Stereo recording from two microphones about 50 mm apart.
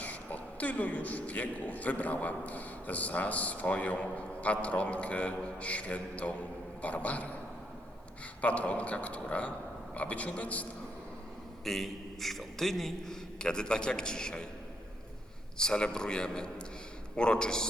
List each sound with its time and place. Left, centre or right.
0.0 s speech: left
8.4 s speech: left
11.6 s a man's voice: centre
13.4 s a man's voice: centre
15.5 s a man's voice: centre